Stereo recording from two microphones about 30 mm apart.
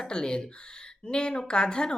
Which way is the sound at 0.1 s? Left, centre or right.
Left.